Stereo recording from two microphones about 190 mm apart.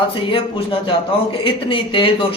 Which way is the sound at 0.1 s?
25° left (ahead or behind).